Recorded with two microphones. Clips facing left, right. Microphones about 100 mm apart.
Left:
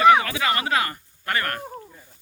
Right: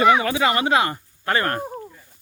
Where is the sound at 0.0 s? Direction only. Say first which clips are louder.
Even; 25° right (ahead or behind).